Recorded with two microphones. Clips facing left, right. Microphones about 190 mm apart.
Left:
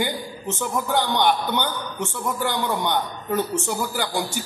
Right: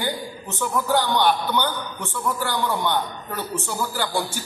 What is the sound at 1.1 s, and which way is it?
A man's voice, 20° left (ahead or behind).